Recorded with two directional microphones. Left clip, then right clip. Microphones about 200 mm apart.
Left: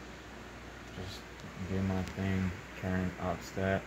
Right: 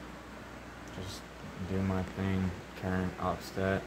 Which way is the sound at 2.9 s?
5° left (ahead or behind).